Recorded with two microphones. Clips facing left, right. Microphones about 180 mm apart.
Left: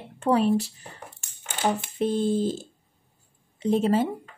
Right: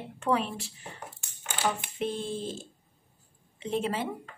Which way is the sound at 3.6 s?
40° left (ahead or behind).